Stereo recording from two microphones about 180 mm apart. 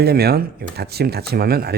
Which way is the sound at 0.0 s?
60° right (ahead or behind).